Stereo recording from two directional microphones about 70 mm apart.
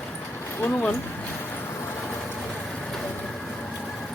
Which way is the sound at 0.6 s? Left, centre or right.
Left.